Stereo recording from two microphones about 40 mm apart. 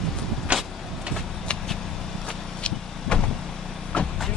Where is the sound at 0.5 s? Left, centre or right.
Right.